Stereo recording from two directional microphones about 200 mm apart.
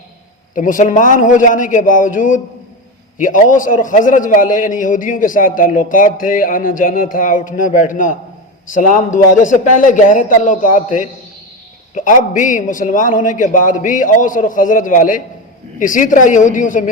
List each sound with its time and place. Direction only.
0.5 s a man's voice: 40° left (ahead or behind)